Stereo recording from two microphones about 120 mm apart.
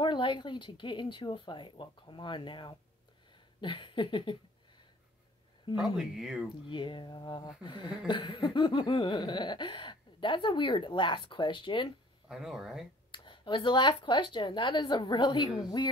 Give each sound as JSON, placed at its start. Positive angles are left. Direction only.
{"t": 0.0, "sound": "laughter", "side_deg": 40}
{"t": 5.9, "sound": "speech", "side_deg": 0}
{"t": 6.7, "sound": "speech", "side_deg": 40}
{"t": 8.1, "sound": "laughter", "side_deg": 45}
{"t": 12.3, "sound": "speech", "side_deg": -5}
{"t": 13.1, "sound": "speech", "side_deg": 40}